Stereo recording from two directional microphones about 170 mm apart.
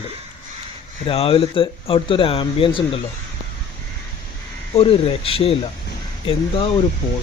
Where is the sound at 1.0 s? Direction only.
35° left (ahead or behind).